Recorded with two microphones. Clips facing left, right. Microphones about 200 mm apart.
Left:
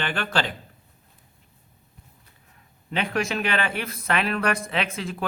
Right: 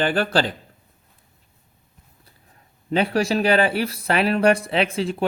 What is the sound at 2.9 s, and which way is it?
Speech, 35° right (ahead or behind).